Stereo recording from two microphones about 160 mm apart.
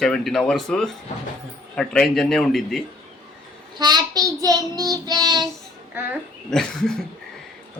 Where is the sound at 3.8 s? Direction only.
25° right (ahead or behind).